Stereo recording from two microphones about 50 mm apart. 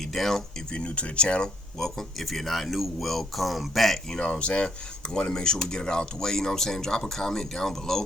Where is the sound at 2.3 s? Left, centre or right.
Centre.